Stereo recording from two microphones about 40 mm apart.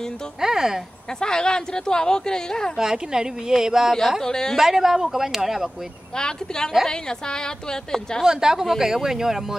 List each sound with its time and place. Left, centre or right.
0.4 s speech: centre
1.2 s speech: centre
2.8 s speech: centre
4.2 s speech: centre
4.6 s speech: centre
6.1 s speech: centre
8.2 s speech: centre